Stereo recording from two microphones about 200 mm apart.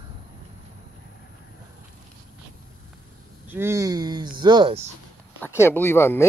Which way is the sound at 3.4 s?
10° right (ahead or behind).